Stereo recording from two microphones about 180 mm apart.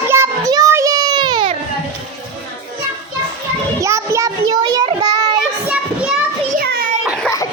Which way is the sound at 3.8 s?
15° right (ahead or behind).